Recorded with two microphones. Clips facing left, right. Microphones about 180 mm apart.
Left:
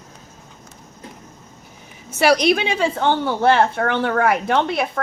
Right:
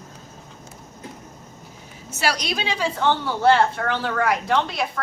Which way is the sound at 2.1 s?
60° left (ahead or behind).